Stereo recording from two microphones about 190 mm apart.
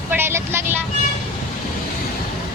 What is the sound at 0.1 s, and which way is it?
Vehicle, 10° right (ahead or behind).